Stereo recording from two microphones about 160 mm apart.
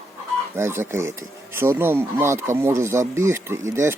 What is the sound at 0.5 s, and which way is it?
Speech, 15° right (ahead or behind).